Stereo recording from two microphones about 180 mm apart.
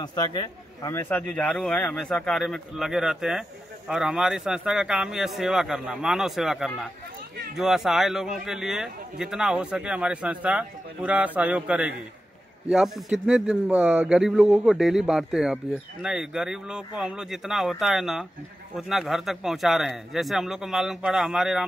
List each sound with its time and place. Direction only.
0.0 s a man's voice: 20° left (ahead or behind); by 21.6 s centre (ahead or behind)